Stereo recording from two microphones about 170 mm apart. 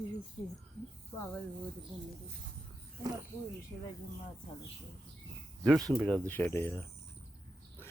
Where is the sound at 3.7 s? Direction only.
25° left (ahead or behind).